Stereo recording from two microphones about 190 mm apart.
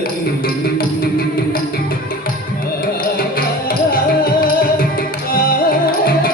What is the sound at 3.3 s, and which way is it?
Music, 50° left (ahead or behind).